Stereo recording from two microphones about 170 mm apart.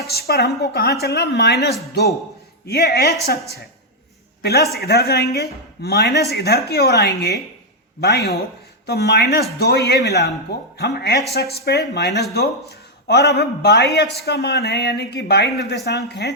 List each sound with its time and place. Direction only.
0.1 s a man's voice: 70° left (ahead or behind)
4.4 s a man's voice: 70° left (ahead or behind)